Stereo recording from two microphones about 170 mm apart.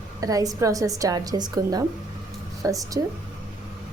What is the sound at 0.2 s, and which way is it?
A woman's voice, 20° right (ahead or behind).